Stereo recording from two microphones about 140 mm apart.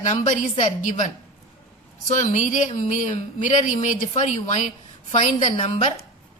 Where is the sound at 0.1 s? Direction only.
60° left (ahead or behind).